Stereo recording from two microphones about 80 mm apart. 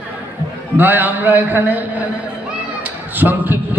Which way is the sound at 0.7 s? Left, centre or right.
Right.